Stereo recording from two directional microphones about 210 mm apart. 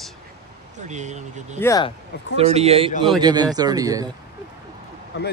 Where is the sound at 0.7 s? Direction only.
35° right (ahead or behind).